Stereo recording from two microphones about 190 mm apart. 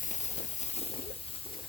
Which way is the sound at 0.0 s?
40° left (ahead or behind).